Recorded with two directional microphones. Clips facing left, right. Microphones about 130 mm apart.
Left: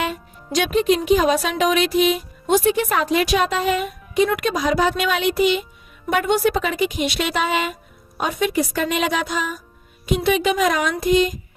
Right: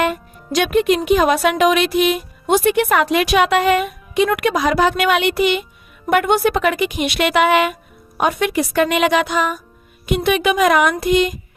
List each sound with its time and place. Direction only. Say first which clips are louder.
0.0 s speech: right 6 dB; 60° right (ahead or behind)